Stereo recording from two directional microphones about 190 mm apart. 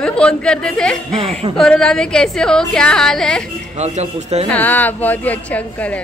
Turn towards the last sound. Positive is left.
turn(degrees=10)  # may be behind; listen again after turning